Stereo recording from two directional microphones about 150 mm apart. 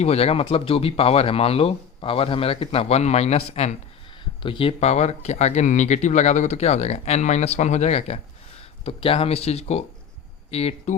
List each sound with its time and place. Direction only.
0.0 s speech: 45° left (ahead or behind)